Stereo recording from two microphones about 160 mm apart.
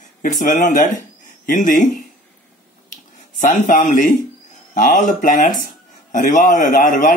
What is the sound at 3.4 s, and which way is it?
Speech, 55° left (ahead or behind).